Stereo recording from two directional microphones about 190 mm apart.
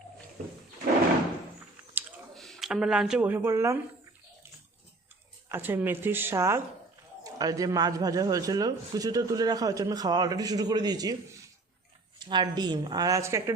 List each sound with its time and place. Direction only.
2.3 s speech: centre (ahead or behind); by 3.8 s 15° right (ahead or behind)
5.5 s a man's voice: 10° right (ahead or behind)